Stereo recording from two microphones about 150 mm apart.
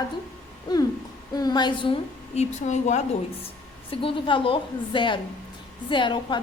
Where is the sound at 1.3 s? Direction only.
25° left (ahead or behind).